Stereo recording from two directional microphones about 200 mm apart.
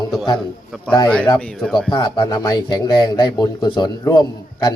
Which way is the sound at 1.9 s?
20° left (ahead or behind).